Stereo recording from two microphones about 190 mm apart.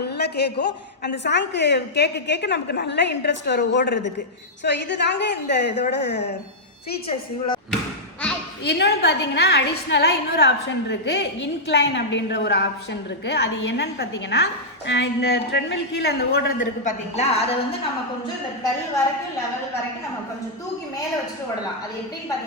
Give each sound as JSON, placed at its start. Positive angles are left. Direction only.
{"t": 0.0, "sound": "a woman's voice", "side_deg": 60}
{"t": 7.1, "sound": "speech", "side_deg": 25}
{"t": 8.6, "sound": "a woman's voice", "side_deg": 60}
{"t": 16.8, "sound": "a woman's voice", "side_deg": 35}